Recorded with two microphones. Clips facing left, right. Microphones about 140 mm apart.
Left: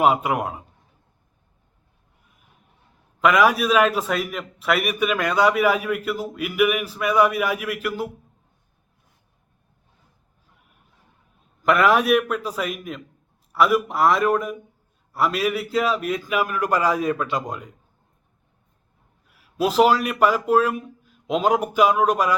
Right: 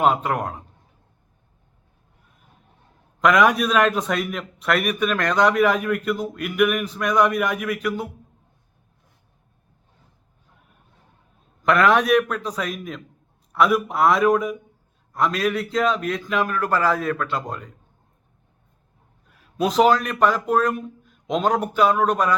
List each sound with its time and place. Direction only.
0.0 s a man's voice: 10° left (ahead or behind)
3.2 s a man's voice: 5° left (ahead or behind)
11.6 s a man's voice: 5° left (ahead or behind)
19.3 s speech: 5° left (ahead or behind)